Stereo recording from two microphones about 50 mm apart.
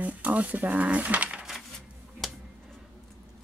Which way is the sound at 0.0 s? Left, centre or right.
Right.